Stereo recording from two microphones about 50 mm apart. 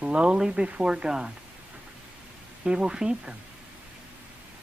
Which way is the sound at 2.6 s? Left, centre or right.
Centre.